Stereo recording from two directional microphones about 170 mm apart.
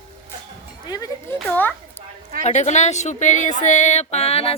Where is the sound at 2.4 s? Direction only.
40° left (ahead or behind).